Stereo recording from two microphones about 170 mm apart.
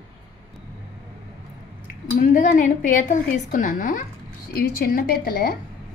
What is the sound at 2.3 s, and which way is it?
A woman's voice, 50° left (ahead or behind).